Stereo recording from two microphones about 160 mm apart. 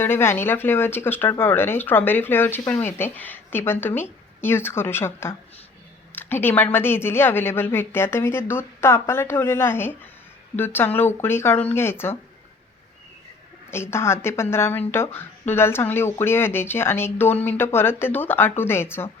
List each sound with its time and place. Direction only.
0.0 s speech: 15° left (ahead or behind)
13.7 s speech: 15° left (ahead or behind)